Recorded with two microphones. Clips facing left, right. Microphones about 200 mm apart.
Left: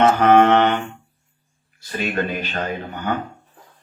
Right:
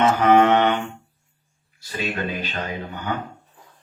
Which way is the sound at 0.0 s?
55° left (ahead or behind).